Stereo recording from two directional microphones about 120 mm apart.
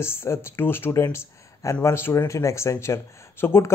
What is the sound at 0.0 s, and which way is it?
A man's voice, 20° left (ahead or behind).